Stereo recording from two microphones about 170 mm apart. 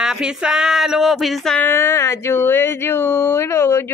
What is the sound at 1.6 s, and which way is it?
Speech, 15° left (ahead or behind).